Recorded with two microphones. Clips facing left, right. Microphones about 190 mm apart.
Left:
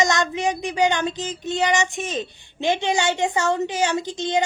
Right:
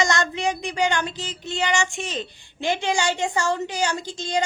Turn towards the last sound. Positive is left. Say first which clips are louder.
# left 4 dB
turn(degrees=20)  # may be behind; listen again after turning